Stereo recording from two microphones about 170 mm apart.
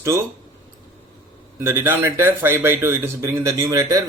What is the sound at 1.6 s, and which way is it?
Speech, 15° right (ahead or behind).